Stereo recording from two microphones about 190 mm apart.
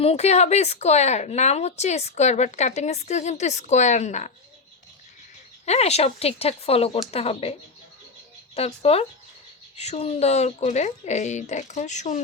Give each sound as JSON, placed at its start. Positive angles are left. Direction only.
{"t": 0.0, "sound": "speech", "side_deg": 35}
{"t": 5.6, "sound": "speech", "side_deg": 35}
{"t": 8.5, "sound": "speech", "side_deg": 30}